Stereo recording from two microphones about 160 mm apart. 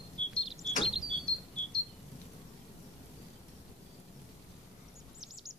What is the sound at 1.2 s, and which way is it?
Cricket, 5° left (ahead or behind).